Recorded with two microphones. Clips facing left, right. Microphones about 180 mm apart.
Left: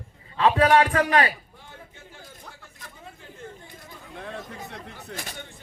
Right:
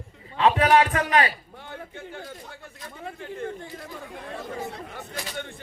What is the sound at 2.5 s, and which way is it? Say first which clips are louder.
Speech: right 6 dB; 65° right (ahead or behind).